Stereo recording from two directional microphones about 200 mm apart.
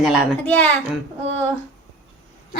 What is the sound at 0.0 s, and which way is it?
Speech, centre (ahead or behind).